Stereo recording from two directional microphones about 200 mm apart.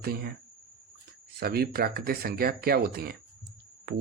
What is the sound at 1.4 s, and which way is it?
Speech, 50° right (ahead or behind).